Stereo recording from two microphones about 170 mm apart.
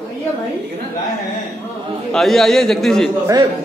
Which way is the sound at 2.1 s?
Centre (ahead or behind).